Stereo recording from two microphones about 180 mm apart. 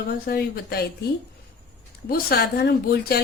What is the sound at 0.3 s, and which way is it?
Speech, 60° left (ahead or behind).